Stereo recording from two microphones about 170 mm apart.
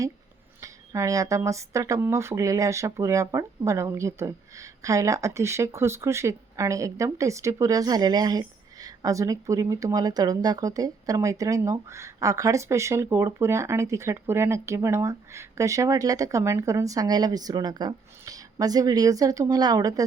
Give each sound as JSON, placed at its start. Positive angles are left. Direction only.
{"t": 0.6, "sound": "speech", "side_deg": -20}